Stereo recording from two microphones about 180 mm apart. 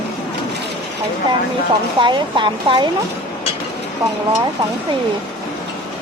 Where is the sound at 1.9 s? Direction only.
25° right (ahead or behind).